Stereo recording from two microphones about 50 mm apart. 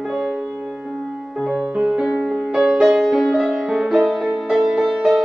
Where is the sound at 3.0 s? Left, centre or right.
Centre.